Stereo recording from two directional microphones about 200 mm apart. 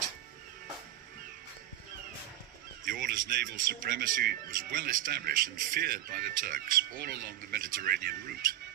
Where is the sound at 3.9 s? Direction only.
50° right (ahead or behind).